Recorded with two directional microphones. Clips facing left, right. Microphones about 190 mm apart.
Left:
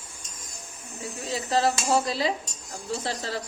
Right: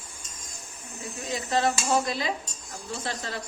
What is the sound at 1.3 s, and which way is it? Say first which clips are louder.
Speech: left 1 dB; 30° left (ahead or behind).